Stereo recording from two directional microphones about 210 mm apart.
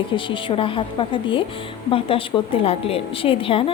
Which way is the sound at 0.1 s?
25° left (ahead or behind).